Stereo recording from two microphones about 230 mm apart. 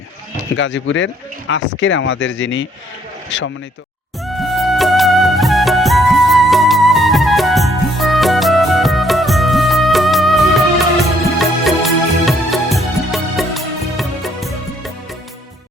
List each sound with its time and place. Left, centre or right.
0.5 s speech: left
4.2 s music: centre